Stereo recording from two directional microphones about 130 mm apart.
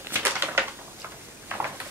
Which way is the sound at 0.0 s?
15° right (ahead or behind).